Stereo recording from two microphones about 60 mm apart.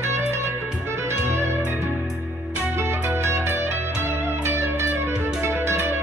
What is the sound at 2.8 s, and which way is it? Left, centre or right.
Music, right.